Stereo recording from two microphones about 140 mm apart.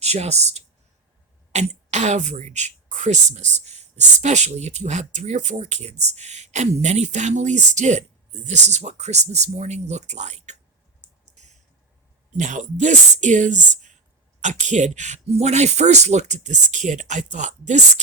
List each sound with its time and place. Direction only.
0.0 s speech: 50° right (ahead or behind)
12.4 s speech: 60° right (ahead or behind)